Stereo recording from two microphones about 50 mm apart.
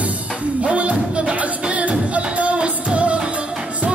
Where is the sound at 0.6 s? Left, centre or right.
Right.